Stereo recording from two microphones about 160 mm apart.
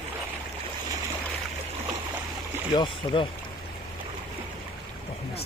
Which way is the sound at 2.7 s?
30° left (ahead or behind).